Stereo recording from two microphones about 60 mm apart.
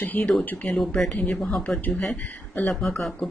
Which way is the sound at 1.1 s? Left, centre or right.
Left.